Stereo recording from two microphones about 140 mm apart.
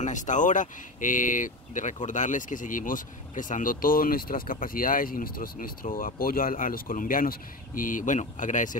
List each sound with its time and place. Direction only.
0.0 s speech: 60° left (ahead or behind)